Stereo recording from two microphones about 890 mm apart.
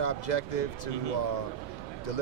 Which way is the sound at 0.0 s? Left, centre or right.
Left.